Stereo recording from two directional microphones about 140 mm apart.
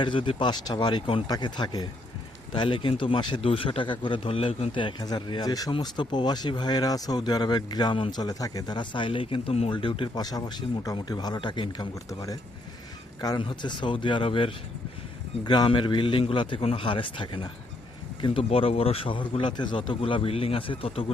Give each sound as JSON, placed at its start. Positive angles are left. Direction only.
{"t": 0.0, "sound": "speech", "side_deg": 35}
{"t": 10.2, "sound": "speech", "side_deg": 25}